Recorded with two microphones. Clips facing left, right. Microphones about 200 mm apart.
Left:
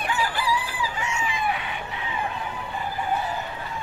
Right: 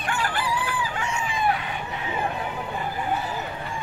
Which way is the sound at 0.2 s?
60° right (ahead or behind).